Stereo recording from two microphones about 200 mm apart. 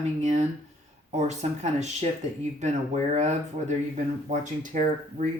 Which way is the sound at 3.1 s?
35° right (ahead or behind).